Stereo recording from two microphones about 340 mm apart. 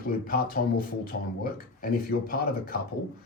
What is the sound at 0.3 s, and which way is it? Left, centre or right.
Speech, left.